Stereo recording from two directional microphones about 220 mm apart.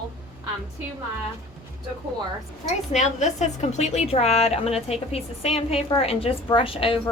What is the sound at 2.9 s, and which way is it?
A woman's voice, 30° left (ahead or behind).